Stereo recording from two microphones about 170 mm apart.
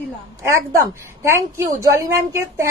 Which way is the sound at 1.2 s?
15° right (ahead or behind).